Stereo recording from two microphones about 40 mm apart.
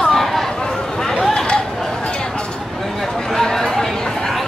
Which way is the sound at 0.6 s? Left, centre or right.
Centre.